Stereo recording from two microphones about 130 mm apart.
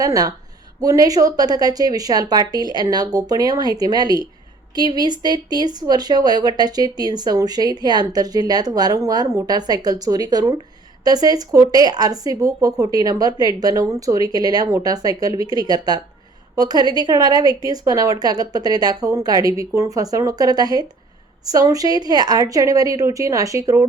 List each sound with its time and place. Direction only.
0.0 s a woman's voice: 30° right (ahead or behind)